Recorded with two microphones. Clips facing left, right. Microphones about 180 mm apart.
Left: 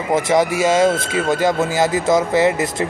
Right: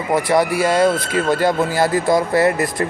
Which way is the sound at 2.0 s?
20° left (ahead or behind).